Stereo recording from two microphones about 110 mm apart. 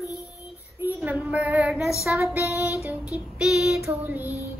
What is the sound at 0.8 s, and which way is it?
Child singing, 15° right (ahead or behind).